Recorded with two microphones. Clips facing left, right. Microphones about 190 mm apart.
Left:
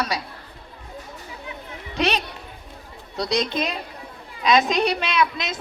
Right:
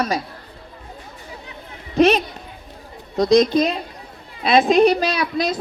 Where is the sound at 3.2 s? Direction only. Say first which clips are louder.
Right 9 dB; 35° right (ahead or behind).